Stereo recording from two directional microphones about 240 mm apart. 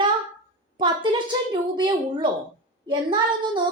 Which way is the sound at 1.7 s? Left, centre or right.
Centre.